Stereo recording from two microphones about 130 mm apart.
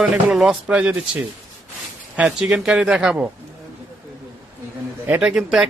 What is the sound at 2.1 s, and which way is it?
Speech, 5° right (ahead or behind).